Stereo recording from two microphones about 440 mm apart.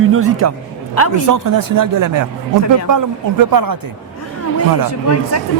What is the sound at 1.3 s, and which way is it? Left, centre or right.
Speech, right.